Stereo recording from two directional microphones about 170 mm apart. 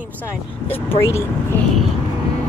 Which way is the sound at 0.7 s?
15° left (ahead or behind).